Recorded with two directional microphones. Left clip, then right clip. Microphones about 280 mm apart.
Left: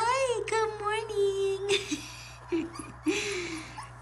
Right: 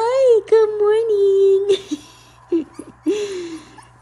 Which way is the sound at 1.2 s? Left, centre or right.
Right.